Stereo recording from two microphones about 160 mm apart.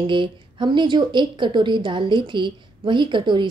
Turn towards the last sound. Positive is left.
turn(degrees=-30)  # may be behind; listen again after turning